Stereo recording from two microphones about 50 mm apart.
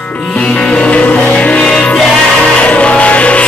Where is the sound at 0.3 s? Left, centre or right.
Left.